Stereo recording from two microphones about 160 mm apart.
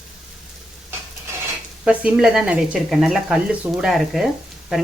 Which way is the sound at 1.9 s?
5° right (ahead or behind).